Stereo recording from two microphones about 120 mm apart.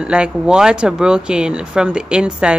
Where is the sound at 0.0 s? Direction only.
10° right (ahead or behind).